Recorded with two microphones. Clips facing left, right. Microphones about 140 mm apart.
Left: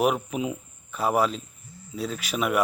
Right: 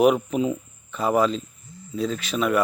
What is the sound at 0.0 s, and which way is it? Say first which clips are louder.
Speech: right 5 dB; centre (ahead or behind).